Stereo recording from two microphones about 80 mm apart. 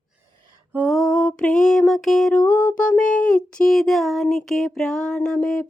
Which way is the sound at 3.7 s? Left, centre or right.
Centre.